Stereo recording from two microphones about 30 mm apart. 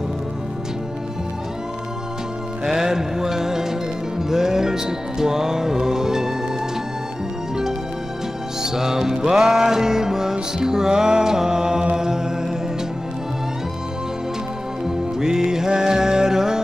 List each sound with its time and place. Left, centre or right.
2.6 s music: centre
8.6 s music: centre
12.0 s chant: centre
14.9 s music: centre